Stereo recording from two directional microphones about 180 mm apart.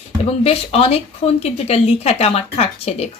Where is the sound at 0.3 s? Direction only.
35° left (ahead or behind).